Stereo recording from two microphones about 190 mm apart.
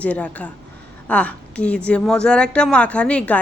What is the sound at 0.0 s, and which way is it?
A woman's voice, 5° left (ahead or behind).